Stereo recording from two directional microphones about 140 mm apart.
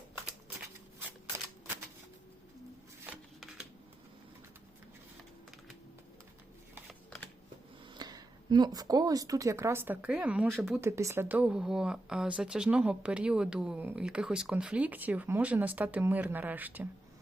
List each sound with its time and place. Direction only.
7.9 s a woman's voice: 30° right (ahead or behind); by 10.8 s centre (ahead or behind)
10.8 s speech: 20° right (ahead or behind)